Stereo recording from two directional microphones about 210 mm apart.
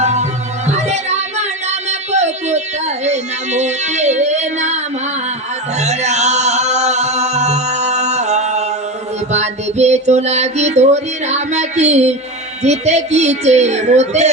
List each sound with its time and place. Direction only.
0.0 s music: 35° right (ahead or behind)
0.7 s child singing: 30° right (ahead or behind)
1.9 s a sound: 35° right (ahead or behind)
3.0 s music: 35° right (ahead or behind)
5.8 s music: 30° right (ahead or behind)